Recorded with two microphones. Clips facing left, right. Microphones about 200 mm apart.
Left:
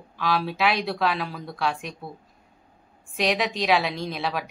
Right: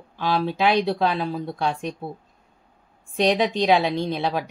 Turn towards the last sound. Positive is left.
turn(degrees=-30)  # may be behind; listen again after turning